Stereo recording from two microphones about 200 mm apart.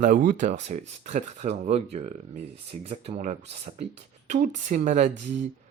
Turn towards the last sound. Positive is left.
turn(degrees=-35)  # may be behind; listen again after turning